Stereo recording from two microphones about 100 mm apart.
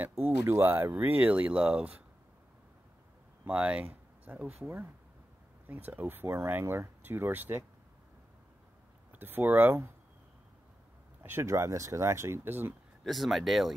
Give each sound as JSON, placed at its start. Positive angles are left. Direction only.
{"t": 0.0, "sound": "speech", "side_deg": -25}
{"t": 3.4, "sound": "speech", "side_deg": -15}
{"t": 5.7, "sound": "speech", "side_deg": -15}
{"t": 9.1, "sound": "speech", "side_deg": -20}
{"t": 11.2, "sound": "speech", "side_deg": -25}
{"t": 13.0, "sound": "speech", "side_deg": 0}